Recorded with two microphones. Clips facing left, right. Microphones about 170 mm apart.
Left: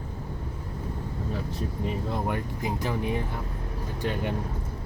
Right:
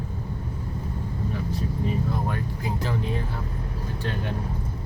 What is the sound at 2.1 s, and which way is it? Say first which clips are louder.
Speech: even; 15° left (ahead or behind).